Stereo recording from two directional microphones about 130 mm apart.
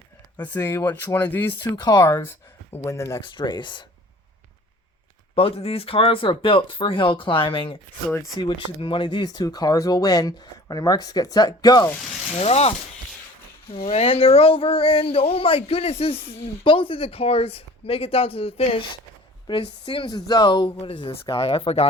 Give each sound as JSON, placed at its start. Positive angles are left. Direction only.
{"t": 0.3, "sound": "speech", "side_deg": 15}
{"t": 1.7, "sound": "speech", "side_deg": 35}
{"t": 3.2, "sound": "speech", "side_deg": 35}
{"t": 5.3, "sound": "speech", "side_deg": 45}
{"t": 12.4, "sound": "speech", "side_deg": 50}
{"t": 13.7, "sound": "speech", "side_deg": 50}